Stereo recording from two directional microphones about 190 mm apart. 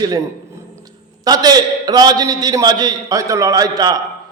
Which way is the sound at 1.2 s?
20° right (ahead or behind).